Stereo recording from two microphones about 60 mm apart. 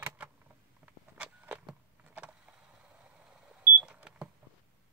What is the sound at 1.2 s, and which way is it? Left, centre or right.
Vehicle, right.